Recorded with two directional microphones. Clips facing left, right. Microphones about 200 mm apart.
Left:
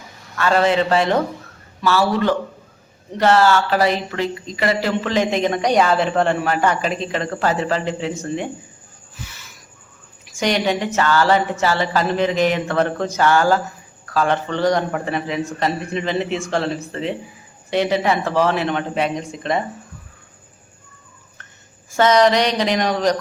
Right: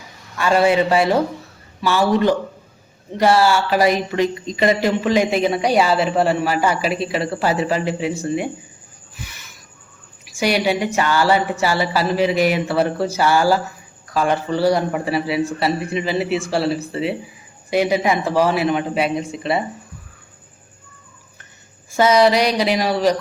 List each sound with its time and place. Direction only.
0.3 s speech: 10° right (ahead or behind)
10.2 s speech: 10° right (ahead or behind)
21.9 s speech: 10° right (ahead or behind)